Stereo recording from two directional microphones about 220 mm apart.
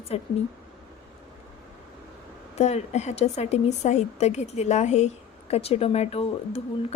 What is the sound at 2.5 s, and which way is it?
Speech, 30° left (ahead or behind).